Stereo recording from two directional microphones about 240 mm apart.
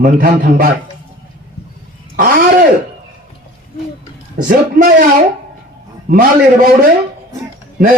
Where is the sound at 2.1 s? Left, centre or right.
Right.